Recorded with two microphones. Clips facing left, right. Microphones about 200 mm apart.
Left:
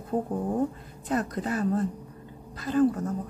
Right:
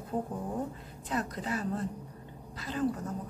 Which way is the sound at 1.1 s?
50° left (ahead or behind).